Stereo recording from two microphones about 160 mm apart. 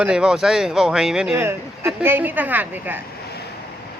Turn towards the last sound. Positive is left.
turn(degrees=-10)  # may be behind; listen again after turning